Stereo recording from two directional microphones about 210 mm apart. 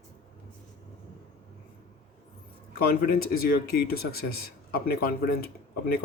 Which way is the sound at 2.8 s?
45° left (ahead or behind).